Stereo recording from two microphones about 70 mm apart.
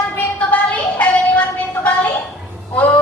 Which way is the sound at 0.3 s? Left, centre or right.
Centre.